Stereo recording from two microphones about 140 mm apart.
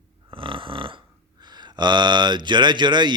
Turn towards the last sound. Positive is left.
turn(degrees=-30)  # may be behind; listen again after turning